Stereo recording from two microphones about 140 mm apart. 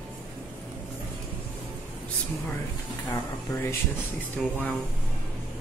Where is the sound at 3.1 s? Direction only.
20° left (ahead or behind).